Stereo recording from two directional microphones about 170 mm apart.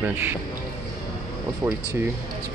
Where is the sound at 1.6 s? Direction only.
25° right (ahead or behind).